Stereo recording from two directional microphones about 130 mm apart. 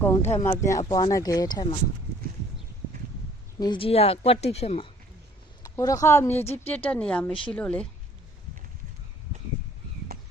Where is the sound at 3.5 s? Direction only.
35° left (ahead or behind).